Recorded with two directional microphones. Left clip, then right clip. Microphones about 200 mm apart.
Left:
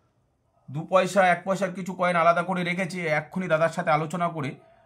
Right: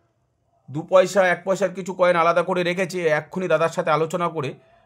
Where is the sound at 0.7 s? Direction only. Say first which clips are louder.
Right 6 dB; 40° right (ahead or behind).